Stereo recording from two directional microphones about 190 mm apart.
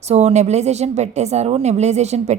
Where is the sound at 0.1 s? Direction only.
35° right (ahead or behind).